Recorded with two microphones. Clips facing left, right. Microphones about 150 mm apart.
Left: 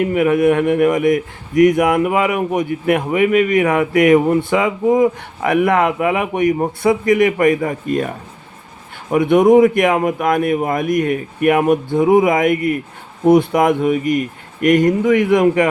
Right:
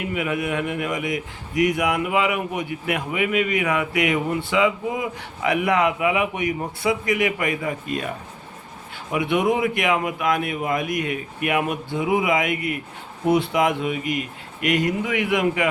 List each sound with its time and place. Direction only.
0.0 s a man's voice: 50° left (ahead or behind)
9.1 s a man's voice: 45° left (ahead or behind)